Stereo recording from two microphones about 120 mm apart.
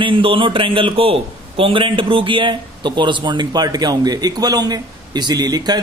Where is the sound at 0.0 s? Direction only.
50° right (ahead or behind).